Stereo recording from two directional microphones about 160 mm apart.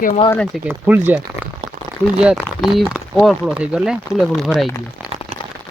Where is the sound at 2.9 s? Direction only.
10° left (ahead or behind).